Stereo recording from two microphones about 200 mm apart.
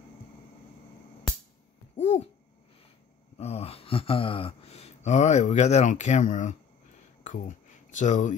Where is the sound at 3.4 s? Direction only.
30° left (ahead or behind).